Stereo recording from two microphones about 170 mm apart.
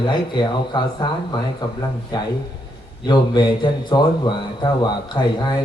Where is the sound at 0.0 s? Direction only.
25° left (ahead or behind).